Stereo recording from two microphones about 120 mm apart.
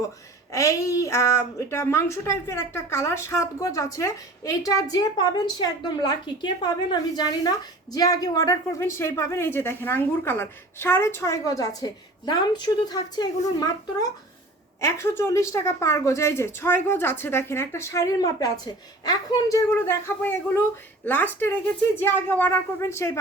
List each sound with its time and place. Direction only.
0.5 s a woman's voice: 25° left (ahead or behind)
14.8 s a woman's voice: 25° left (ahead or behind)